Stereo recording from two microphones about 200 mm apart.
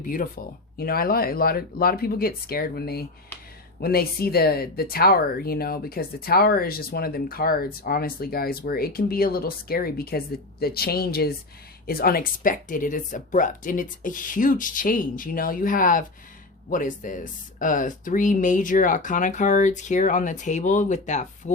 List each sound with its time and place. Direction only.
0.0 s speech: 40° left (ahead or behind)